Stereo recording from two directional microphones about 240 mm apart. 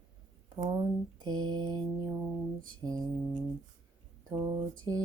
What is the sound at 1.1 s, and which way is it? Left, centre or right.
Female singing, centre.